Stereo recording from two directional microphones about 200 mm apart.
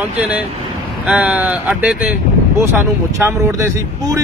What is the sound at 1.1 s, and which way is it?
Speech, 5° right (ahead or behind).